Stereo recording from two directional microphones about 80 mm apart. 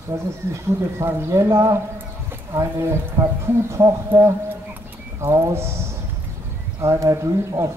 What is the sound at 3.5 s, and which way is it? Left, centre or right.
A man's voice, right.